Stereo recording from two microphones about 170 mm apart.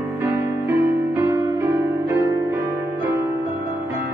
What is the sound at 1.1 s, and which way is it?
Music, 20° right (ahead or behind).